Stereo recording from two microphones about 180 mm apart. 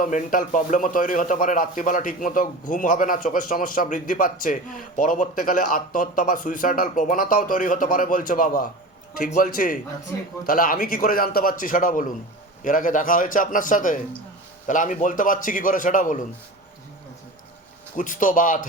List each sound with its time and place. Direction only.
0.0 s a man's voice: 50° left (ahead or behind)
17.9 s a man's voice: 50° left (ahead or behind)